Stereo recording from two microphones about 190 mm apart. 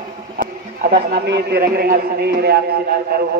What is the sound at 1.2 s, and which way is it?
A man's voice, 60° right (ahead or behind).